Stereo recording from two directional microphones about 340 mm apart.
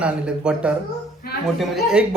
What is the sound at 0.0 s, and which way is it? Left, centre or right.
Speech, centre.